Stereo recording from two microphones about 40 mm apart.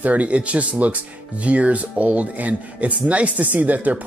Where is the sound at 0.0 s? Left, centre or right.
Right.